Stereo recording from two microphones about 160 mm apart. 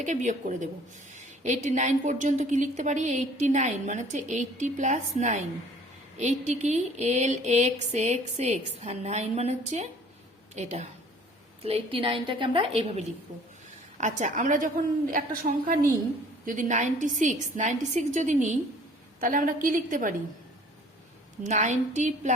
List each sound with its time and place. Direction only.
0.0 s a woman's voice: 50° right (ahead or behind)
14.0 s a woman's voice: 50° right (ahead or behind)
21.4 s a woman's voice: 50° right (ahead or behind)